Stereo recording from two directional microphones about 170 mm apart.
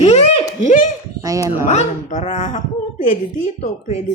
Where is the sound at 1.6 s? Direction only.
40° left (ahead or behind).